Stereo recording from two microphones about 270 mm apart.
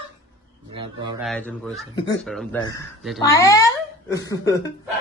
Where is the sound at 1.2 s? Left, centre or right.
Centre.